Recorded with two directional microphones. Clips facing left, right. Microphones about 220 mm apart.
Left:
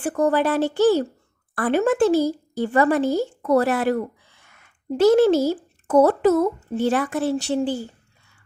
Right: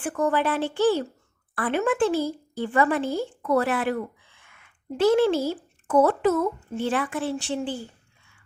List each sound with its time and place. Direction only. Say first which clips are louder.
0.0 s a woman's voice: left 4 dB; 40° left (ahead or behind)